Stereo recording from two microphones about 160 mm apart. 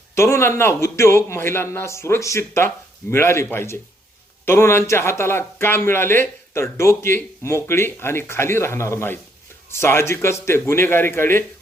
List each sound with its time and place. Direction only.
0.1 s speech: 15° left (ahead or behind)